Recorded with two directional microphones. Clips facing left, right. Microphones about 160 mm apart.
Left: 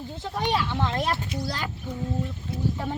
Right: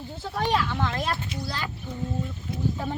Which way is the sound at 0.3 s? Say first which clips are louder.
Right 1 dB; 10° left (ahead or behind).